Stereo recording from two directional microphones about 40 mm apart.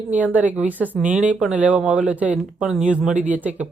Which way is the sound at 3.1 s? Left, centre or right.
Right.